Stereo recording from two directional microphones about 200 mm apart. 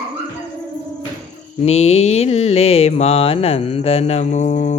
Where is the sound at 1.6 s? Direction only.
30° left (ahead or behind).